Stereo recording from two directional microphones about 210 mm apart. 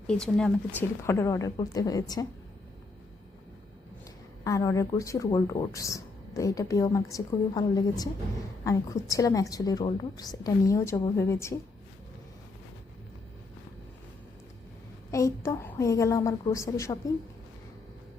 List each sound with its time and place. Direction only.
0.1 s speech: 5° left (ahead or behind)
4.4 s speech: 15° left (ahead or behind)
15.1 s speech: 15° left (ahead or behind)